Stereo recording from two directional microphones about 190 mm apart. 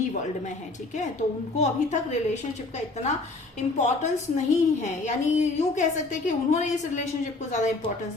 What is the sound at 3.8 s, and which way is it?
A woman's voice, 40° left (ahead or behind).